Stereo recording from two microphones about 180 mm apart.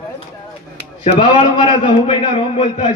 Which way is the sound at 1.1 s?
30° left (ahead or behind).